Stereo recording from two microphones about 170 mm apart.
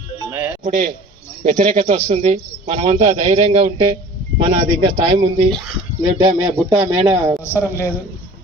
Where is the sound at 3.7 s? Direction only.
25° right (ahead or behind).